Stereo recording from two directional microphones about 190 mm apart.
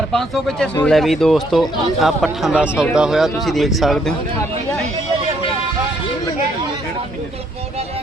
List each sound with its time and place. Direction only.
0.1 s speech: centre (ahead or behind)